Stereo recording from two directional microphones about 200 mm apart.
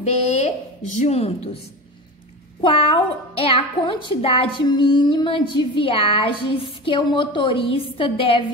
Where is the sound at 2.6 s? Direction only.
25° left (ahead or behind).